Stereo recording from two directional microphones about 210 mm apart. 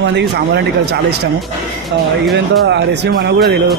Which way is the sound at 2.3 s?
55° right (ahead or behind).